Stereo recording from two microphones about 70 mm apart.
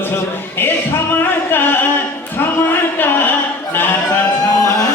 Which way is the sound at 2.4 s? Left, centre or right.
Left.